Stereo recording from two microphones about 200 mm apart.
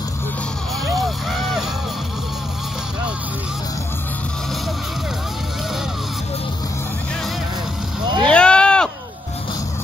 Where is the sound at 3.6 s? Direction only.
15° left (ahead or behind).